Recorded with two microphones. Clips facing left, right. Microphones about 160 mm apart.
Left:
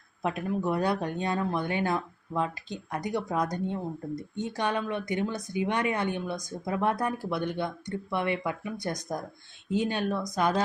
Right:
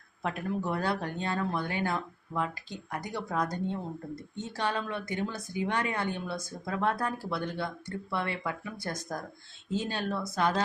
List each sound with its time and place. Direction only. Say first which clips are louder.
0.2 s speech: left 3 dB; 20° left (ahead or behind)